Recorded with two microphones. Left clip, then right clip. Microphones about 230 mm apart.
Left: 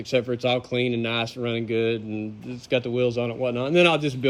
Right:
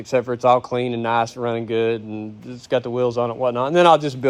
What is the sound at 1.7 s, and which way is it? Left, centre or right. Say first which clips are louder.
A man's voice: right 3 dB; centre.